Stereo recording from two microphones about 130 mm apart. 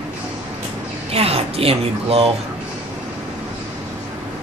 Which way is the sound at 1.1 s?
50° right (ahead or behind).